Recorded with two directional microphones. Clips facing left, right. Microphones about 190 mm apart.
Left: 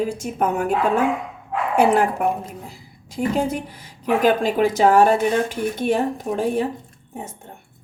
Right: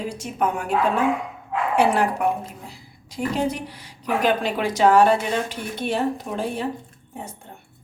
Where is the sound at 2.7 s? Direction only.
45° left (ahead or behind).